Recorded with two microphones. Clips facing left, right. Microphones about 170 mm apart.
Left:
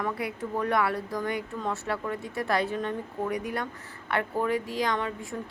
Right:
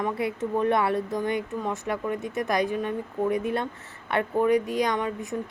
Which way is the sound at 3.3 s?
25° right (ahead or behind).